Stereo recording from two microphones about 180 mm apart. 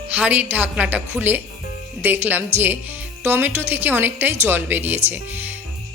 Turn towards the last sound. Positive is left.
turn(degrees=-10)  # may be behind; listen again after turning